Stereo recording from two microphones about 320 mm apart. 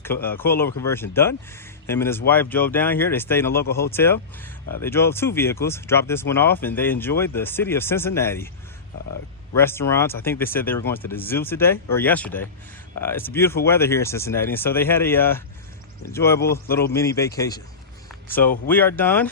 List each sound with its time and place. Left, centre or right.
0.0 s speech: centre
9.6 s speech: centre
18.1 s a sound: centre
18.7 s speech: centre